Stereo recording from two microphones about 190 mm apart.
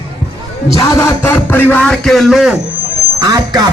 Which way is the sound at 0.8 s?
15° left (ahead or behind).